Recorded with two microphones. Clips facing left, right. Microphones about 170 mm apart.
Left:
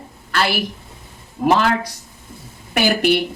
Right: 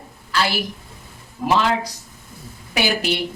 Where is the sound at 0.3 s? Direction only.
60° left (ahead or behind).